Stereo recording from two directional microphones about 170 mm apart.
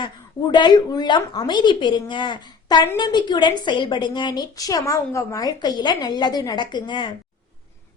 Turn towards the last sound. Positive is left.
turn(degrees=25)  # may be behind; listen again after turning